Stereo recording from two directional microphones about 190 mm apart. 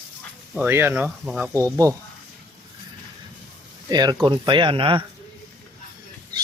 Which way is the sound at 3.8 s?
20° right (ahead or behind).